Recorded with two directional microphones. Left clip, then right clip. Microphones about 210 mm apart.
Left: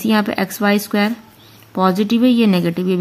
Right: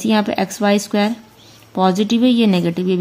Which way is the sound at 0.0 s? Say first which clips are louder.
Even; 5° left (ahead or behind).